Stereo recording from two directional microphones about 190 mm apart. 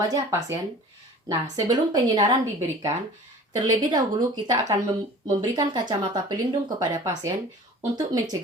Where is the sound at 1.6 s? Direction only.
20° right (ahead or behind).